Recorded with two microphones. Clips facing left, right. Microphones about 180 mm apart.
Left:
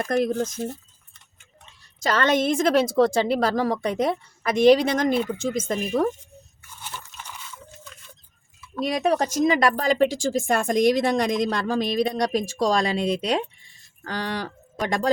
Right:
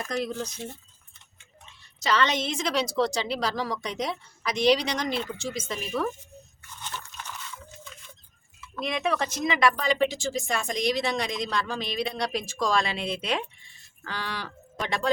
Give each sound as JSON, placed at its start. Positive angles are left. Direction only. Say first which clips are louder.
{"t": 0.0, "sound": "speech", "louder": "left 8 dB", "side_deg": 55}
{"t": 2.0, "sound": "speech", "louder": "left 4 dB", "side_deg": 50}
{"t": 6.6, "sound": "crunch", "louder": "even", "side_deg": 10}
{"t": 8.7, "sound": "speech", "louder": "left 6 dB", "side_deg": 35}